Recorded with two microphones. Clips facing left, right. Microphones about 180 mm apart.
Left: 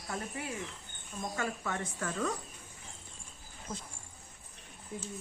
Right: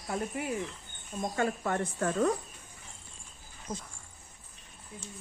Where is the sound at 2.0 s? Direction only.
35° right (ahead or behind).